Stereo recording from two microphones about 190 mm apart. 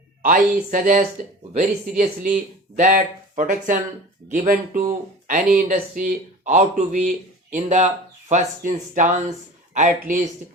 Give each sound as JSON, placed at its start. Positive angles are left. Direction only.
{"t": 0.2, "sound": "speech", "side_deg": -45}